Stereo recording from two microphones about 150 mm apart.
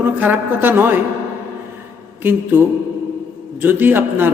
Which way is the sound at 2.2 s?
15° right (ahead or behind).